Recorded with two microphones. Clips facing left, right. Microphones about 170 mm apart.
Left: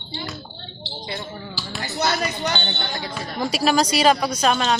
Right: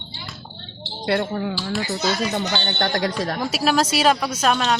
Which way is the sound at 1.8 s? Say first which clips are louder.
Left 2 dB; 60° left (ahead or behind).